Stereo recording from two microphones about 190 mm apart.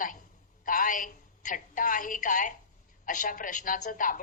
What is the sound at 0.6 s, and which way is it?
A woman's voice, 45° left (ahead or behind).